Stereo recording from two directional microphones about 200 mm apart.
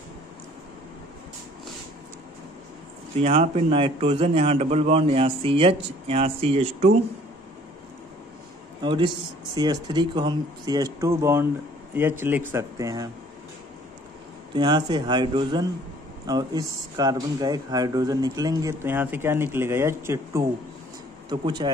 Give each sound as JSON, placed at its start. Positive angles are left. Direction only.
{"t": 3.2, "sound": "a man's voice", "side_deg": -30}
{"t": 8.8, "sound": "a man's voice", "side_deg": -25}
{"t": 14.5, "sound": "a man's voice", "side_deg": -20}